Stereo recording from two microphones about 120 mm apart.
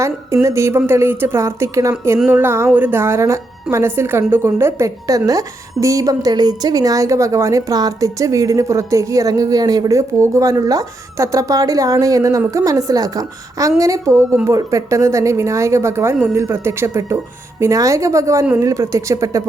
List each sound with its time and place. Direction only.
0.4 s a woman's voice: 25° right (ahead or behind)